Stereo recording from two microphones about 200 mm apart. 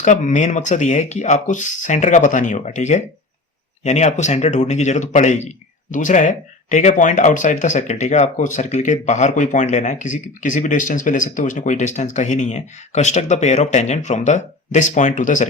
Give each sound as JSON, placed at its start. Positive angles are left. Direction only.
{"t": 0.0, "sound": "speech", "side_deg": 40}